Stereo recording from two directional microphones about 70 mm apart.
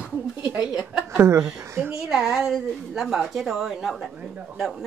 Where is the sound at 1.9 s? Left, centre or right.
Centre.